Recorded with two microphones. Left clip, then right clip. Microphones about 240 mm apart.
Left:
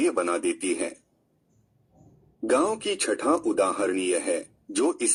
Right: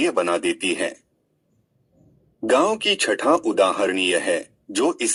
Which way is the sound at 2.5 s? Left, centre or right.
Right.